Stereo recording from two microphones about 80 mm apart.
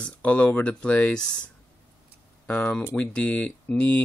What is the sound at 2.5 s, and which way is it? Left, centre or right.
Speech, centre.